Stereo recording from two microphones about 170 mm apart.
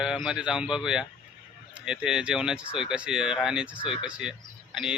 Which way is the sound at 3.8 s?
30° left (ahead or behind).